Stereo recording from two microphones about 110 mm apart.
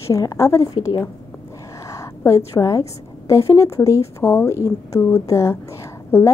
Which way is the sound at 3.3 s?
30° left (ahead or behind).